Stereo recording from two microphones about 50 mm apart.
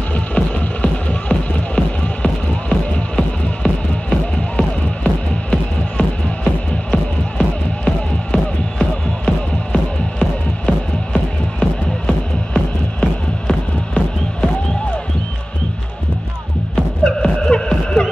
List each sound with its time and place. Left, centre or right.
0.1 s music: left
16.7 s music: centre